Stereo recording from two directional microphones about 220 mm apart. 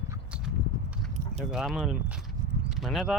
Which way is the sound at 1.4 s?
Centre (ahead or behind).